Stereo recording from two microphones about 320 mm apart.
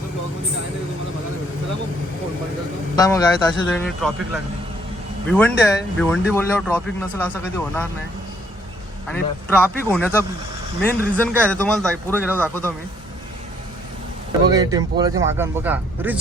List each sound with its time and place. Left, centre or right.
2.9 s a man's voice: centre
9.0 s speech: centre
14.5 s speech: centre